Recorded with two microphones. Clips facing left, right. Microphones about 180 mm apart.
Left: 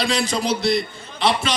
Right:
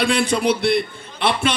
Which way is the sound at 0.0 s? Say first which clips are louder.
Right 4 dB; 55° right (ahead or behind).